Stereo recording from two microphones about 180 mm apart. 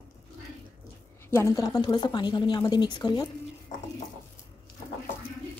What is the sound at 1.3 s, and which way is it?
Speech, 15° left (ahead or behind).